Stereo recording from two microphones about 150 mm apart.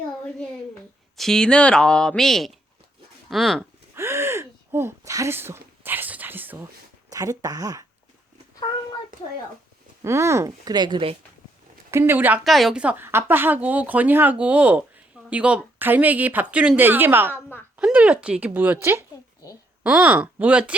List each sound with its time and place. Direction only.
1.1 s speech: 5° left (ahead or behind)
3.9 s gasp: 15° right (ahead or behind)
7.1 s speech: 25° right (ahead or behind)
10.0 s speech: 20° right (ahead or behind); by 11.2 s 35° right (ahead or behind)
11.9 s speech: 15° right (ahead or behind)
12.5 s speech: centre (ahead or behind)